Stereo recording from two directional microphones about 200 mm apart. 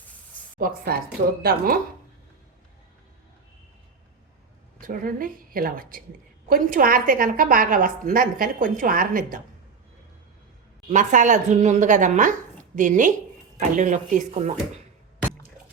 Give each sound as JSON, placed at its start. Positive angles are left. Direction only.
{"t": 0.6, "sound": "a woman's voice", "side_deg": -45}
{"t": 4.8, "sound": "a woman's voice", "side_deg": -45}
{"t": 10.8, "sound": "speech", "side_deg": -40}